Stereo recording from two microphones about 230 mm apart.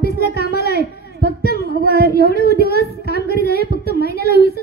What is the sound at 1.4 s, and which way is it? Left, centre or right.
Child singing, left.